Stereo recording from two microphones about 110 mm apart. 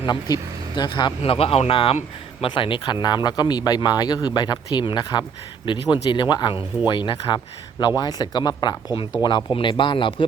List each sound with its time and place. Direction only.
0.0 s speech: 40° left (ahead or behind)
1.2 s speech: 60° left (ahead or behind)